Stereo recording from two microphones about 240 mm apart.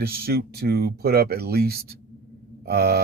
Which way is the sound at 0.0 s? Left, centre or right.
Right.